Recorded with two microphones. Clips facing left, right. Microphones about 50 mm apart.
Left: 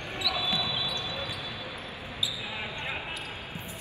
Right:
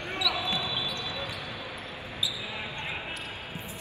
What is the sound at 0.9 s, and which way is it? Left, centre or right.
Basketball bounce, right.